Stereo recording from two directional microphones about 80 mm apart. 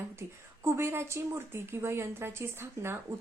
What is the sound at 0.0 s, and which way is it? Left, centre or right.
A woman's voice, right.